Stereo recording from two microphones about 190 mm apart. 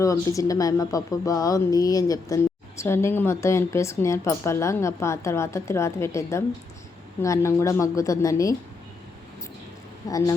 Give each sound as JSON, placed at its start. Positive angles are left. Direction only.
{"t": 0.0, "sound": "a woman's voice", "side_deg": 15}
{"t": 10.1, "sound": "a woman's voice", "side_deg": 20}